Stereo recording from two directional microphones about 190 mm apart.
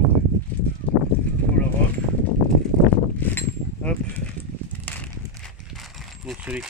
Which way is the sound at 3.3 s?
10° left (ahead or behind).